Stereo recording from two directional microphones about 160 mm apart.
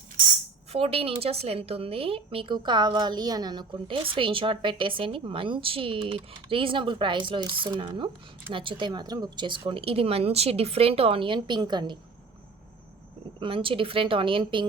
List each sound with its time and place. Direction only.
0.7 s a woman's voice: 40° right (ahead or behind)
13.4 s a woman's voice: 35° right (ahead or behind)